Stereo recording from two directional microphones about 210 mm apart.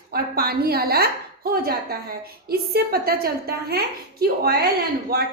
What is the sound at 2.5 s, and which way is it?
A woman's voice, 45° right (ahead or behind).